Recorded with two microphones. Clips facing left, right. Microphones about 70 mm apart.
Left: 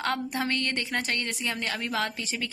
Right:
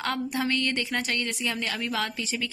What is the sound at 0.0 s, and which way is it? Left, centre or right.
A woman's voice, left.